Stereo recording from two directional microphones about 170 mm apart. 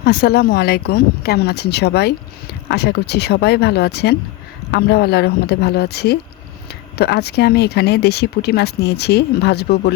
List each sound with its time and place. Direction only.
0.0 s speech: 65° left (ahead or behind)